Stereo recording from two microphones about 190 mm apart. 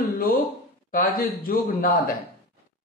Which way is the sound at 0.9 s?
50° left (ahead or behind).